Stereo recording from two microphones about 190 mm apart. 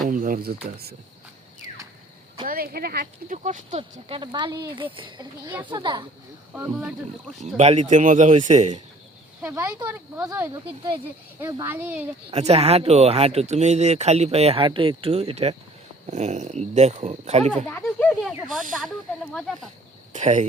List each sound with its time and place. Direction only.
0.1 s speech: 45° right (ahead or behind)
2.5 s speech: 50° right (ahead or behind); by 6.1 s 25° right (ahead or behind)
6.5 s speech: 5° right (ahead or behind)
7.5 s speech: 35° right (ahead or behind)
9.4 s speech: 10° right (ahead or behind)
10.5 s speech: 20° right (ahead or behind)
12.3 s speech: 35° right (ahead or behind)
17.8 s speech: centre (ahead or behind)
20.1 s speech: 40° right (ahead or behind)